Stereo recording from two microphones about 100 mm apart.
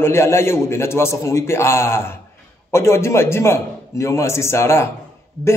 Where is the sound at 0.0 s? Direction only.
25° left (ahead or behind).